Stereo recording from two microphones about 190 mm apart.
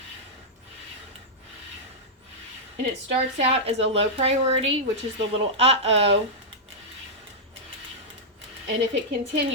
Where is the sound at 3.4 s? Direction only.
30° right (ahead or behind).